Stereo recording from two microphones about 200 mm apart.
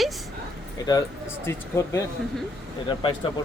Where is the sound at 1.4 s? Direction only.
15° left (ahead or behind).